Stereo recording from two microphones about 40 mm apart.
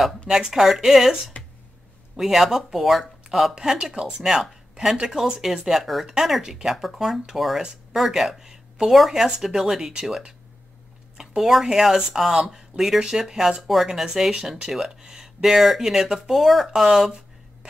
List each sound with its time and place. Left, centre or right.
0.3 s speech: centre
3.5 s speech: centre
6.7 s speech: centre